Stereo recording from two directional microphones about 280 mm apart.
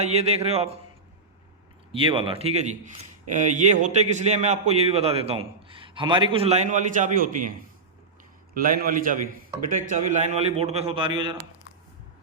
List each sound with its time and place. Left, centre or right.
0.0 s a man's voice: right
1.9 s a man's voice: centre
8.5 s a man's voice: right